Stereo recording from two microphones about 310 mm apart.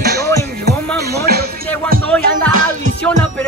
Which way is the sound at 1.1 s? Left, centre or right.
Right.